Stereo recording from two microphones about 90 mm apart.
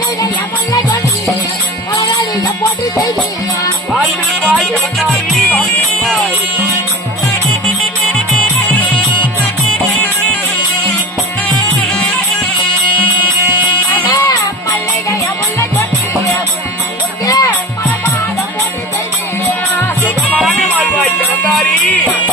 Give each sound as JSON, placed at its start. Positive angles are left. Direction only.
{"t": 4.4, "sound": "music", "side_deg": 0}
{"t": 14.1, "sound": "music", "side_deg": 40}
{"t": 17.2, "sound": "music", "side_deg": 40}
{"t": 20.8, "sound": "music", "side_deg": 15}